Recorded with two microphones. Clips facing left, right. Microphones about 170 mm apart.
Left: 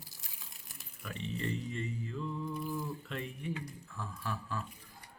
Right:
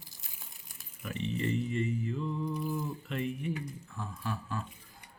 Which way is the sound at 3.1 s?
5° right (ahead or behind).